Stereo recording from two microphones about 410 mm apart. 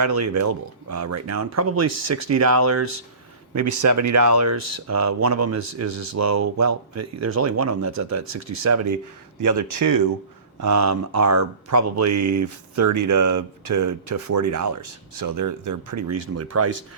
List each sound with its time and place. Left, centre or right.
0.0 s speech: right